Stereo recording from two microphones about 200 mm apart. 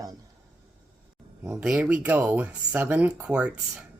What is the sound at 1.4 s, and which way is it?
Speech, 5° right (ahead or behind).